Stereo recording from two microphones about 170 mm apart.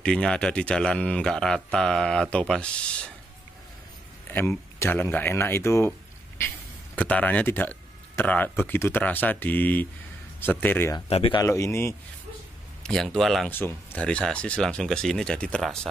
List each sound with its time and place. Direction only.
0.0 s speech: 5° left (ahead or behind)
4.3 s speech: 10° left (ahead or behind)
11.1 s speech: 35° left (ahead or behind)
11.4 s speech: 15° left (ahead or behind)
12.8 s speech: 5° left (ahead or behind)
13.5 s speech: 10° left (ahead or behind)